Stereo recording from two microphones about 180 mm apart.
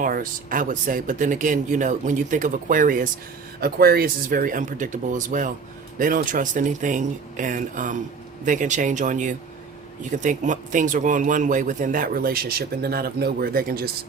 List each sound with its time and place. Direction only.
0.0 s speech: 50° right (ahead or behind)